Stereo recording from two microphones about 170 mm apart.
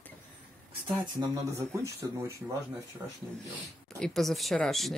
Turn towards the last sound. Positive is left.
turn(degrees=0)  # may be behind; listen again after turning